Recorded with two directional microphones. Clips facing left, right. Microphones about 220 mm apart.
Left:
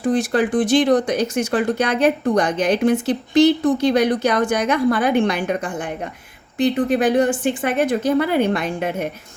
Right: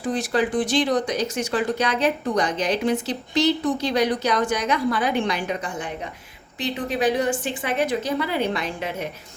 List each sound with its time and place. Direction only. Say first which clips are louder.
0.1 s speech: left 4 dB; 55° left (ahead or behind)